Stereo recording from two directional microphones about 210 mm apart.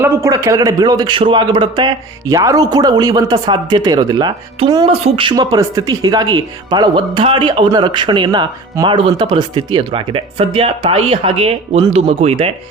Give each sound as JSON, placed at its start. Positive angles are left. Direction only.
{"t": 0.0, "sound": "a man's voice", "side_deg": -15}